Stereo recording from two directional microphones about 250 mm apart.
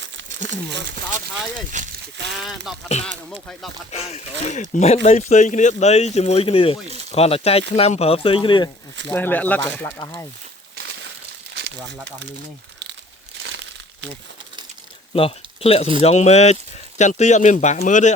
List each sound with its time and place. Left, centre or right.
1.7 s speech: right
2.1 s speech: right
2.7 s speech: centre
3.9 s speech: left
9.1 s speech: centre
11.5 s a sound: right
13.4 s crumpling: right
15.1 s speech: left